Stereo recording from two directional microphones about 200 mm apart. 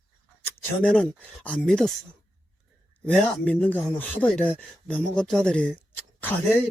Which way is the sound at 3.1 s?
10° left (ahead or behind).